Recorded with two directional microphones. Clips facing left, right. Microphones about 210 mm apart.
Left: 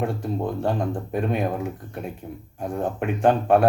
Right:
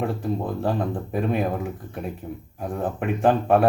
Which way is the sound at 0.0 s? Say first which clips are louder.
Even; centre (ahead or behind).